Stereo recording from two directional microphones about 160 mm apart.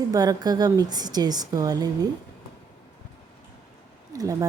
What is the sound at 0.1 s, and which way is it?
A woman's voice, 25° right (ahead or behind).